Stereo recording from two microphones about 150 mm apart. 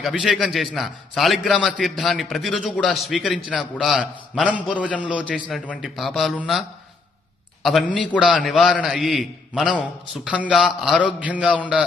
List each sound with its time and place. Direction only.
0.0 s a man's voice: centre (ahead or behind)
5.2 s a man's voice: 5° left (ahead or behind)